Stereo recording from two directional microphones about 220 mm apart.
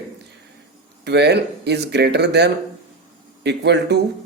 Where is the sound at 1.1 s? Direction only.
50° right (ahead or behind).